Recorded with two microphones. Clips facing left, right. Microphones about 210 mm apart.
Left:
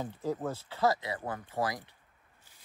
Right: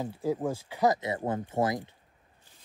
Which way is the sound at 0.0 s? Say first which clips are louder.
Right 4 dB; 10° right (ahead or behind).